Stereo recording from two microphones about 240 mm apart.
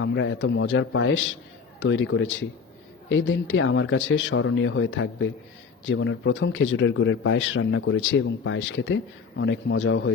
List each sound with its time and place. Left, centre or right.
0.0 s a man's voice: left